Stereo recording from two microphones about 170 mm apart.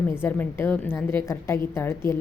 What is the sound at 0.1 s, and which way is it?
Speech, 15° left (ahead or behind).